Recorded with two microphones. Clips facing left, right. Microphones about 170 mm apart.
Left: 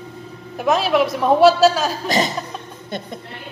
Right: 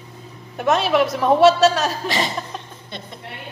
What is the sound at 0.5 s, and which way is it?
A woman's voice, centre (ahead or behind).